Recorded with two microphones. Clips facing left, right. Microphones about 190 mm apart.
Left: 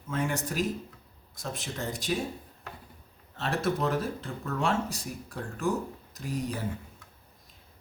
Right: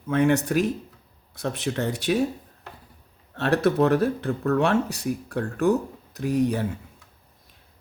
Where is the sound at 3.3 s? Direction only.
65° right (ahead or behind).